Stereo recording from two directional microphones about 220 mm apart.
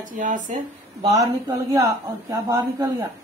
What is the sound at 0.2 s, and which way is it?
Speech, 35° right (ahead or behind).